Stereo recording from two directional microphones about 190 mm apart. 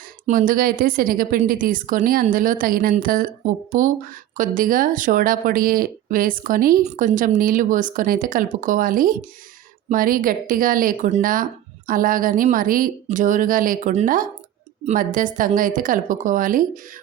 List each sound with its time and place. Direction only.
0.3 s a woman's voice: 45° right (ahead or behind)